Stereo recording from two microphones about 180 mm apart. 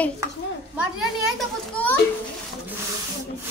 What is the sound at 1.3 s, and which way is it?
Children playing, 10° left (ahead or behind).